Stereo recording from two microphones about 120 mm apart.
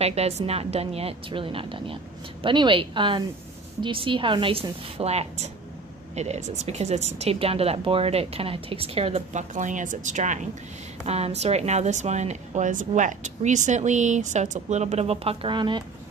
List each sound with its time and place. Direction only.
0.0 s a woman's voice: 60° right (ahead or behind)
9.3 s speech: 90° right
11.1 s a woman's voice: 60° right (ahead or behind)
15.4 s speech: 40° right (ahead or behind)